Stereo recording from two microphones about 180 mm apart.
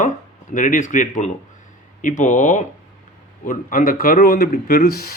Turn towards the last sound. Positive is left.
turn(degrees=55)  # may be behind; listen again after turning